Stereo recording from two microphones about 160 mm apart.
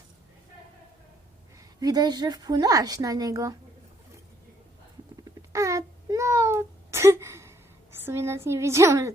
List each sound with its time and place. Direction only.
1.8 s speech: 25° right (ahead or behind)
5.5 s a sound: 20° right (ahead or behind)
8.0 s a woman's voice: 15° right (ahead or behind)